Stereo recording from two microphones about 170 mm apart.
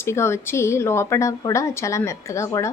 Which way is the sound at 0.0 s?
15° left (ahead or behind).